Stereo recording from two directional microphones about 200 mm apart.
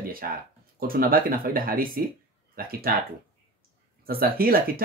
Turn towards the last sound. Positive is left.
turn(degrees=-50)  # may be behind; listen again after turning